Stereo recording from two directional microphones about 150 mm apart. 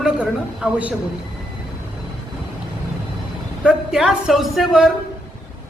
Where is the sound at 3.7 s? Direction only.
5° right (ahead or behind).